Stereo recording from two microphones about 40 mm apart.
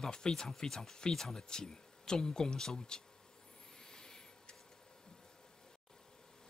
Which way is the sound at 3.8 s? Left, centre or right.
Centre.